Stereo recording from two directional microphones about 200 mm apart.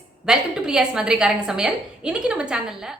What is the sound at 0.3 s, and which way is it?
A woman's voice, 5° right (ahead or behind).